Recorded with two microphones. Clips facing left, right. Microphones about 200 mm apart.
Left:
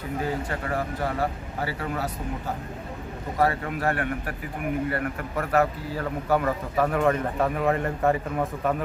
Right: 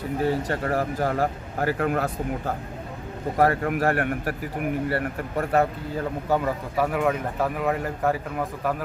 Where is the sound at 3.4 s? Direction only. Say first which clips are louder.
Right 3 dB; 50° right (ahead or behind).